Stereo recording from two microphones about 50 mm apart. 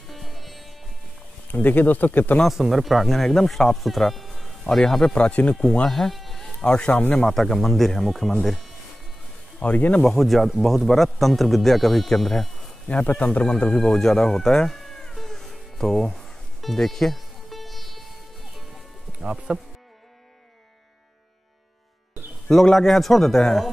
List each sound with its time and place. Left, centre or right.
0.1 s music: centre
1.5 s speech: left
2.4 s speech: centre
5.1 s speech: left
5.6 s speech: centre
6.6 s speech: centre
9.6 s speech: left
10.0 s speech: centre
12.8 s speech: left
13.4 s a sound: centre
19.3 s speech: centre
22.5 s speech: centre